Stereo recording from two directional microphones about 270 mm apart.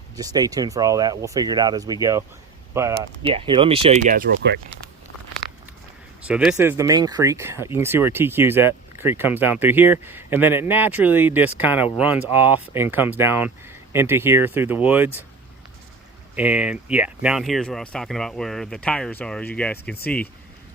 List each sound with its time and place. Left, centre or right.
0.2 s speech: centre; by 4.8 s right
6.2 s speech: centre
16.3 s speech: centre
19.7 s speech: left